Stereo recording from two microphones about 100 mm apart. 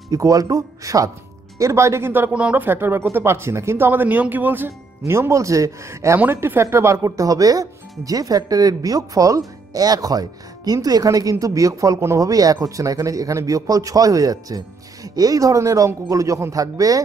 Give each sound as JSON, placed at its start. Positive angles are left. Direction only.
{"t": 0.1, "sound": "speech", "side_deg": -35}